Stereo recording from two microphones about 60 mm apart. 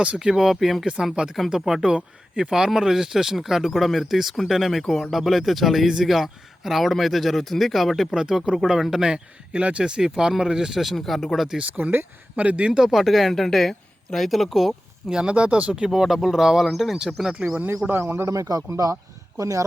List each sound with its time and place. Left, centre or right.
0.0 s a man's voice: centre
1.1 s a man's voice: centre
11.4 s a man's voice: centre
11.8 s speech: right
12.9 s speech: centre
17.8 s a man's voice: right
18.3 s speech: right